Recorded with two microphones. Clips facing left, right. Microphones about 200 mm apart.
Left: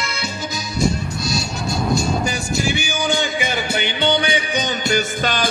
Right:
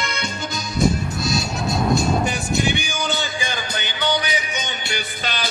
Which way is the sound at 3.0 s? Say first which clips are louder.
Left 5 dB; 20° left (ahead or behind).